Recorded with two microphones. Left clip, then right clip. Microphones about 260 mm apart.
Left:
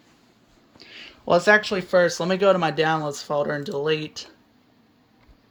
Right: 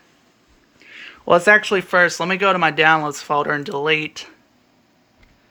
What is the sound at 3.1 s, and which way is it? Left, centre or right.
Speech, right.